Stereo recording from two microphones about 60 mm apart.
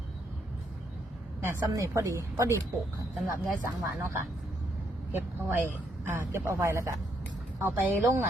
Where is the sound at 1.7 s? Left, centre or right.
Right.